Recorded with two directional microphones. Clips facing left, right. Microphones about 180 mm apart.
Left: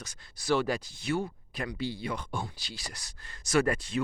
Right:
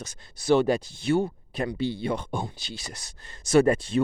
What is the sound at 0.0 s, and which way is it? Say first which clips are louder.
Speech: right 7 dB; 25° right (ahead or behind).